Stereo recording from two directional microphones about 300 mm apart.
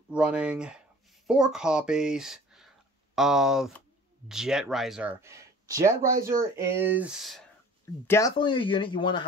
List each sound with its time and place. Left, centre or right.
0.1 s speech: centre
8.1 s speech: centre